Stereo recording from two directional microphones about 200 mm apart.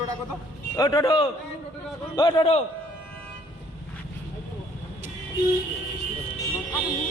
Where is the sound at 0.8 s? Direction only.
20° left (ahead or behind).